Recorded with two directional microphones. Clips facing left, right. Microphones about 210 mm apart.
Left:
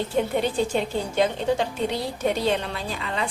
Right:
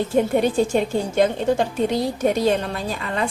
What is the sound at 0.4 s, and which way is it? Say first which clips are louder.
A woman's voice: right 5 dB; 45° right (ahead or behind).